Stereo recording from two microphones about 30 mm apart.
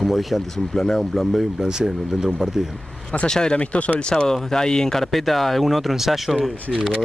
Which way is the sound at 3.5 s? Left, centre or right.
Left.